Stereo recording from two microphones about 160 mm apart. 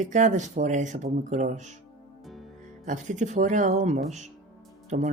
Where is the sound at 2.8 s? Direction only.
50° right (ahead or behind).